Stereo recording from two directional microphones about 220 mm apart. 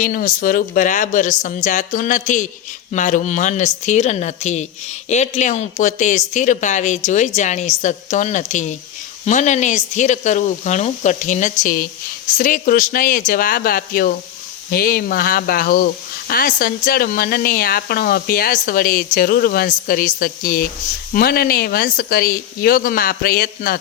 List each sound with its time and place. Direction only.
0.0 s a woman's voice: 40° left (ahead or behind)